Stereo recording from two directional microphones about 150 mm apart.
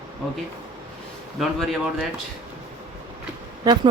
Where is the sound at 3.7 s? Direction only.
25° right (ahead or behind).